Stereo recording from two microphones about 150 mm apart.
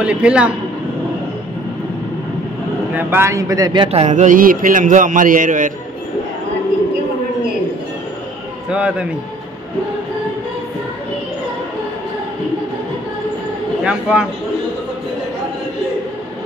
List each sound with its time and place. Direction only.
0.0 s a man's voice: 5° right (ahead or behind)
2.9 s speech: 10° right (ahead or behind); by 3.9 s 25° right (ahead or behind)
3.9 s a man's voice: 50° right (ahead or behind)
8.6 s a man's voice: 5° right (ahead or behind)
13.8 s a man's voice: 5° right (ahead or behind)